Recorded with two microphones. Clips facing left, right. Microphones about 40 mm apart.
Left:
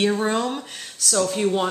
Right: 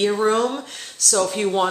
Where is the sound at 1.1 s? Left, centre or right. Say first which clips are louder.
Right 1 dB; centre.